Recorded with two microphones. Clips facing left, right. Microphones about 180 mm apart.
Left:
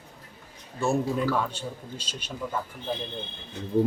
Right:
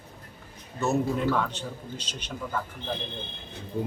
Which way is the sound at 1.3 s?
10° left (ahead or behind).